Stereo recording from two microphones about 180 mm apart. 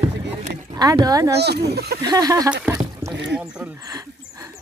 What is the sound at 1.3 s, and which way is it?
Speech, 65° right (ahead or behind).